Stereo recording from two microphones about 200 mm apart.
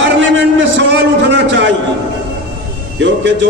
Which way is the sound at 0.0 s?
65° right (ahead or behind).